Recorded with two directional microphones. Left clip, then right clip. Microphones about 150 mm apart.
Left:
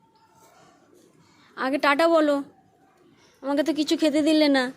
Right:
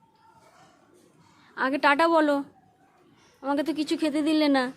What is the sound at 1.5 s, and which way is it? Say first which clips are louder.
A woman's voice: even; 5° left (ahead or behind).